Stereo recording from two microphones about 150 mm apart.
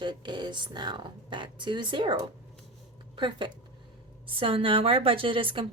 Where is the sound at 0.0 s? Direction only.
30° right (ahead or behind).